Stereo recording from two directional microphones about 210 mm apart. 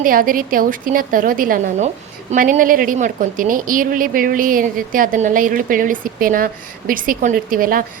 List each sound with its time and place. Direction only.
0.0 s speech: 40° right (ahead or behind)